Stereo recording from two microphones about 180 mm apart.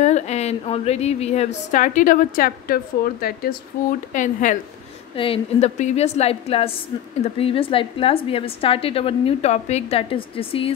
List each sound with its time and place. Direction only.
0.0 s a woman's voice: 40° left (ahead or behind); by 3.5 s 55° left (ahead or behind)
4.1 s a woman's voice: 45° left (ahead or behind)
5.1 s a woman's voice: 30° left (ahead or behind)